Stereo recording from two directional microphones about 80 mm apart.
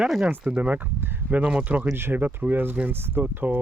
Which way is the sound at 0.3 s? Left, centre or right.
Centre.